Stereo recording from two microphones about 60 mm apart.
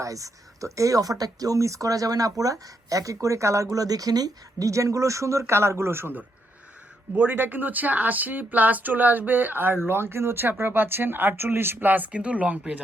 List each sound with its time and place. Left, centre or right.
0.0 s speech: right
7.2 s speech: right